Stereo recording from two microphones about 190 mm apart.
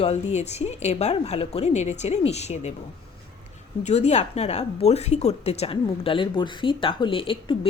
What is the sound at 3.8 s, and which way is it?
Speech, 35° left (ahead or behind).